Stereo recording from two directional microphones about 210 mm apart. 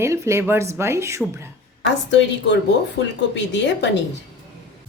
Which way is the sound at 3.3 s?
55° left (ahead or behind).